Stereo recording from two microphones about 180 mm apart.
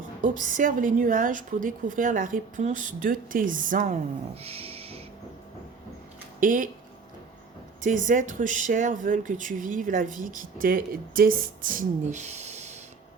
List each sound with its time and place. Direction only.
0.2 s speech: 45° right (ahead or behind)
4.4 s music: 35° right (ahead or behind)
6.4 s speech: 50° right (ahead or behind)
7.8 s speech: 45° right (ahead or behind)